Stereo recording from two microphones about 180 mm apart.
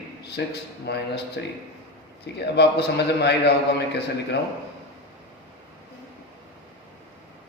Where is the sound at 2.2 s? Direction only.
65° left (ahead or behind).